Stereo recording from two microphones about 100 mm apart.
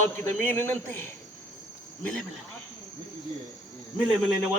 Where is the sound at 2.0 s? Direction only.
5° left (ahead or behind).